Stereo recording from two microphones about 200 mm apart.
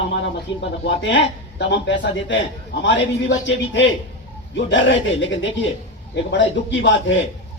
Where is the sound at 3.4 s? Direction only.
65° left (ahead or behind).